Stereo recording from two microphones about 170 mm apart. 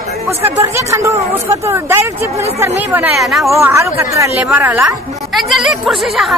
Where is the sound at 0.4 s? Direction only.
15° right (ahead or behind); by 3.5 s centre (ahead or behind).